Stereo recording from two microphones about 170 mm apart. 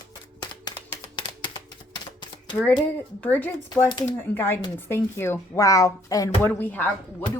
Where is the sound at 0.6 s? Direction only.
25° left (ahead or behind).